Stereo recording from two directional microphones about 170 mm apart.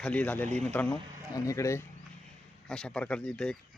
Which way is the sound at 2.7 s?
5° left (ahead or behind).